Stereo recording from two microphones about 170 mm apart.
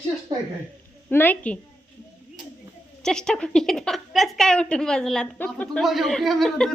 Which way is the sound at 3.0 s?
5° left (ahead or behind).